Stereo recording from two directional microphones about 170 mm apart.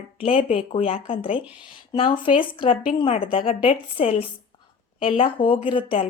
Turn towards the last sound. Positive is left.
turn(degrees=30)  # may be behind; listen again after turning